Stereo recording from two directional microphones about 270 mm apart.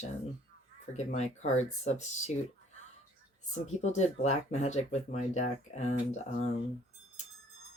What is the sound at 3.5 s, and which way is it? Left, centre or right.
Speech, left.